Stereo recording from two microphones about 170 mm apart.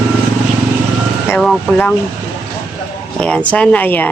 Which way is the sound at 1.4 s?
Centre (ahead or behind).